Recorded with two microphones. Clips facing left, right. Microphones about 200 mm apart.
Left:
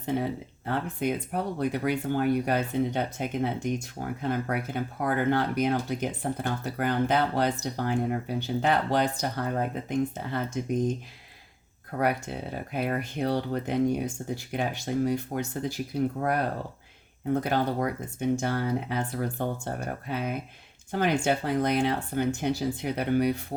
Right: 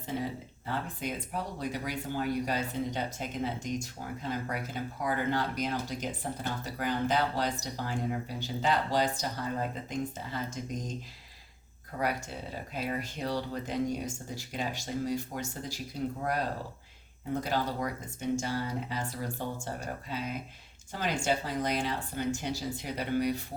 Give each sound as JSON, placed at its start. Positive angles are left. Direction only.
{"t": 0.0, "sound": "speech", "side_deg": 60}